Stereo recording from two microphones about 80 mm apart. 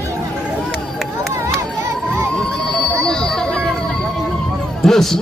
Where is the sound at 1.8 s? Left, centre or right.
Right.